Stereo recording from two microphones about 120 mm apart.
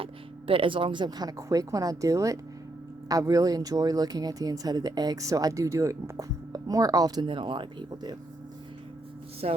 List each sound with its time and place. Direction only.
0.0 s speech: 50° right (ahead or behind); by 7.3 s 30° right (ahead or behind)
7.3 s speech: 45° right (ahead or behind)
9.4 s speech: 60° right (ahead or behind)